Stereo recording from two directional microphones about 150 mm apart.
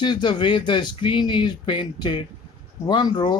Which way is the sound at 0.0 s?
30° left (ahead or behind).